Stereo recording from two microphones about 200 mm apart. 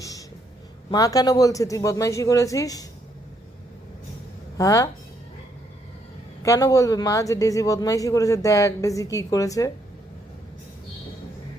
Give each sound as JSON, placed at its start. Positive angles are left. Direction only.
{"t": 0.0, "sound": "a sound", "side_deg": 15}
{"t": 0.9, "sound": "speech", "side_deg": 20}
{"t": 4.5, "sound": "speech", "side_deg": 15}
{"t": 6.4, "sound": "speech", "side_deg": 15}